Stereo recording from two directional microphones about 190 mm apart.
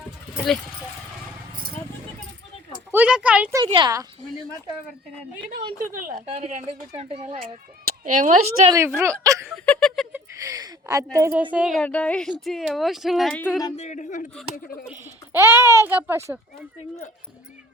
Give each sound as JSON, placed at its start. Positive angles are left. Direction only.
{"t": 2.9, "sound": "speech", "side_deg": -5}
{"t": 3.7, "sound": "a woman's voice", "side_deg": -25}
{"t": 5.8, "sound": "speech", "side_deg": -45}
{"t": 6.9, "sound": "speech", "side_deg": -30}
{"t": 8.0, "sound": "speech", "side_deg": -45}
{"t": 8.7, "sound": "speech", "side_deg": -15}
{"t": 9.2, "sound": "chuckle", "side_deg": -15}
{"t": 9.5, "sound": "a sound", "side_deg": 0}
{"t": 10.1, "sound": "a sound", "side_deg": -20}
{"t": 11.5, "sound": "speech", "side_deg": 0}
{"t": 13.7, "sound": "a man's voice", "side_deg": 40}
{"t": 14.8, "sound": "speech", "side_deg": -10}